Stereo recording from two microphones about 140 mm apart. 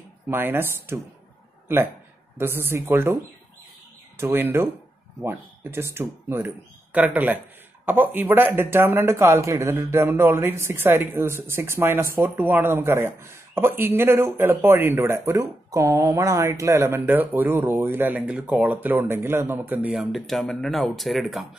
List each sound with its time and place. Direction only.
0.3 s speech: 15° right (ahead or behind)
2.3 s speech: 15° right (ahead or behind)
4.2 s speech: 15° right (ahead or behind); by 21.5 s centre (ahead or behind)